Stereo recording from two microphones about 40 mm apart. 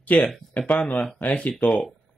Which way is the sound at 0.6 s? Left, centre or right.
Left.